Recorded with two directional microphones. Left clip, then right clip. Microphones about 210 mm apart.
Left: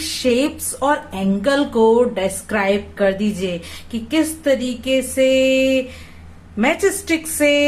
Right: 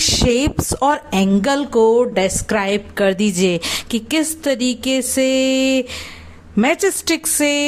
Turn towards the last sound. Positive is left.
turn(degrees=-50)  # may be behind; listen again after turning